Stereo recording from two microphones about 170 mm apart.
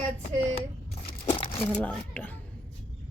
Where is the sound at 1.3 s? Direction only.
35° left (ahead or behind).